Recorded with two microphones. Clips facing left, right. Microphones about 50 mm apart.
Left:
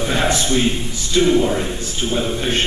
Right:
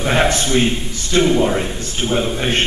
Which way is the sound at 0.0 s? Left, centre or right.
Right.